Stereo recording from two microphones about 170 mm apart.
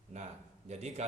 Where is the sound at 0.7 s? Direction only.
40° right (ahead or behind).